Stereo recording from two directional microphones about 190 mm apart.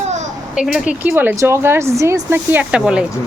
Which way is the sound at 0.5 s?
5° right (ahead or behind).